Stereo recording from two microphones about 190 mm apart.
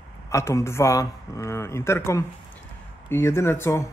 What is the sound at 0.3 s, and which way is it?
Speech, 15° left (ahead or behind).